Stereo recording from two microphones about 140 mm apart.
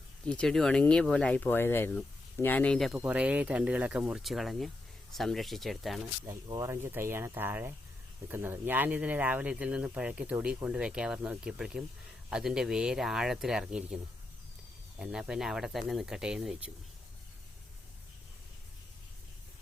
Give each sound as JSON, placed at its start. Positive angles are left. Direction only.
{"t": 0.3, "sound": "speech", "side_deg": 5}
{"t": 2.9, "sound": "speech", "side_deg": -5}
{"t": 6.2, "sound": "speech", "side_deg": -25}